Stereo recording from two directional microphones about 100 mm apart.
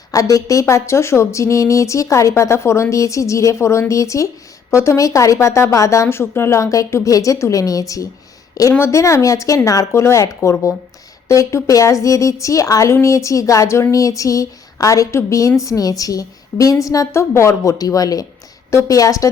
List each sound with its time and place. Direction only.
0.1 s a woman's voice: 35° left (ahead or behind)